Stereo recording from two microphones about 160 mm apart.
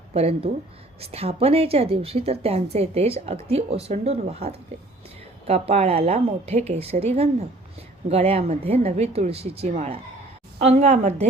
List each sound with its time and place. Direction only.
0.1 s a woman's voice: 40° right (ahead or behind)